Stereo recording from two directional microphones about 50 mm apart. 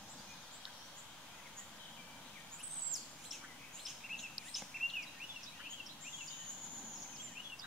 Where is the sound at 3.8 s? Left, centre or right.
Centre.